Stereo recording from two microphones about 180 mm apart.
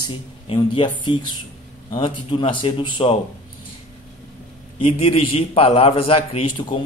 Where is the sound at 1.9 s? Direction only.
30° left (ahead or behind).